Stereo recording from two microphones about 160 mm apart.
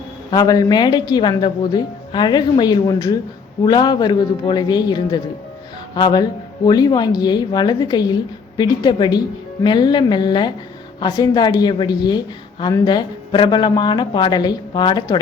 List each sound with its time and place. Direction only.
0.3 s a woman's voice: 25° left (ahead or behind)